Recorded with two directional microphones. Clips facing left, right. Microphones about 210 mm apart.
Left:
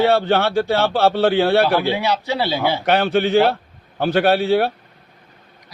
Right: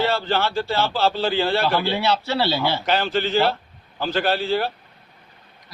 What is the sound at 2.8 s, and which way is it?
Speech, 60° left (ahead or behind).